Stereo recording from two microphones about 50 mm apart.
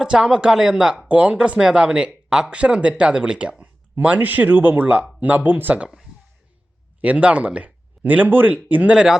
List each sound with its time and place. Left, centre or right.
0.0 s speech: centre
1.0 s speech: right
4.2 s speech: right
7.0 s speech: right
8.9 s speech: centre